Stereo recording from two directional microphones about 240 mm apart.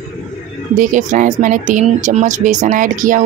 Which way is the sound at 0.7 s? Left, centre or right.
Right.